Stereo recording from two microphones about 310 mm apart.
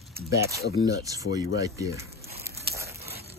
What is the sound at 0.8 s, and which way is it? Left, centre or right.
Speech, centre.